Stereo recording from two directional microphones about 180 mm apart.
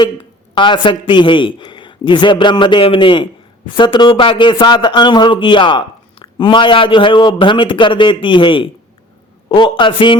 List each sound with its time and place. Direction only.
0.5 s speech: 25° left (ahead or behind)